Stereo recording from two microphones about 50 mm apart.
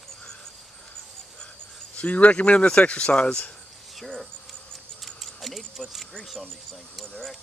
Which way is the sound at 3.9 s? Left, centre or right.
Centre.